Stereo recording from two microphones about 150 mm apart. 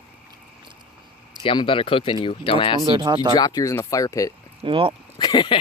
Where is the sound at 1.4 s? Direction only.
35° left (ahead or behind).